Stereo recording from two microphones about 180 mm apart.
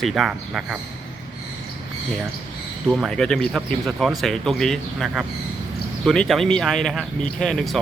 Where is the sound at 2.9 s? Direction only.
Centre (ahead or behind).